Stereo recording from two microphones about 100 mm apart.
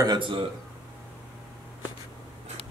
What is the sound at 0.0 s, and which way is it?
Speech, 50° right (ahead or behind).